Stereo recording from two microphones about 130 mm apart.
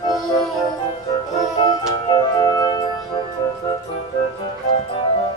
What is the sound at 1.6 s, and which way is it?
Music, 40° left (ahead or behind).